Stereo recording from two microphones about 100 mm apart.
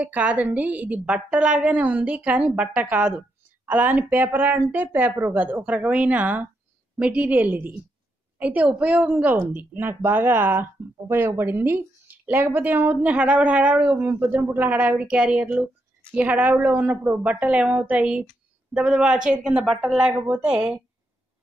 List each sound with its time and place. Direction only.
0.0 s a woman's voice: 15° right (ahead or behind)